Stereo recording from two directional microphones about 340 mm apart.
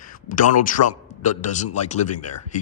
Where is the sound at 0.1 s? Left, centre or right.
Left.